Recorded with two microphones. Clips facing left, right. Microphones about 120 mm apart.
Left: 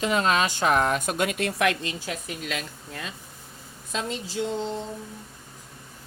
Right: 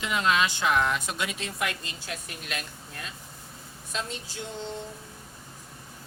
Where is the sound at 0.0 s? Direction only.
40° left (ahead or behind); by 1.7 s 75° left (ahead or behind).